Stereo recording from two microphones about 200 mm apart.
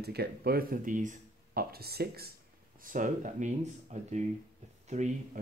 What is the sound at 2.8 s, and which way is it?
Speech, 40° right (ahead or behind).